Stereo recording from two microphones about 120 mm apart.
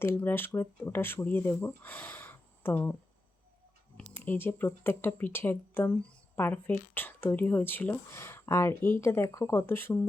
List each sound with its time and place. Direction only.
0.0 s speech: 20° left (ahead or behind)
3.9 s speech: 15° left (ahead or behind)